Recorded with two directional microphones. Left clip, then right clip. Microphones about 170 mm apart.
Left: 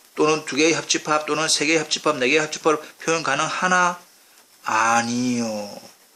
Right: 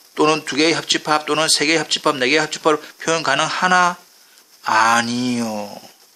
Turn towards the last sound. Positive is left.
turn(degrees=-35)  # may be behind; listen again after turning